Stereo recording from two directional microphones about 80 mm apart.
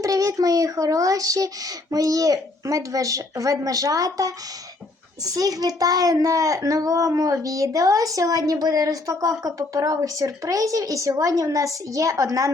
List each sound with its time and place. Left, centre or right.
0.0 s a child's voice: right